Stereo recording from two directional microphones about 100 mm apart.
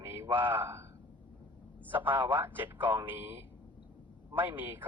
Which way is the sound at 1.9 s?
20° right (ahead or behind).